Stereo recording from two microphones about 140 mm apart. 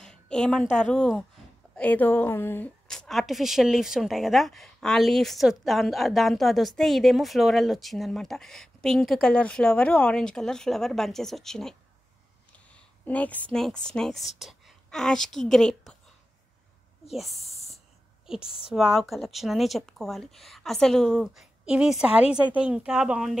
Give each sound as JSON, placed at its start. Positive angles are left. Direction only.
{"t": 0.0, "sound": "a woman's voice", "side_deg": 5}
{"t": 2.9, "sound": "speech", "side_deg": 0}
{"t": 13.0, "sound": "speech", "side_deg": 10}
{"t": 17.1, "sound": "speech", "side_deg": 0}
{"t": 17.4, "sound": "a sound", "side_deg": 50}
{"t": 18.2, "sound": "a sound", "side_deg": -5}
{"t": 18.7, "sound": "speech", "side_deg": -5}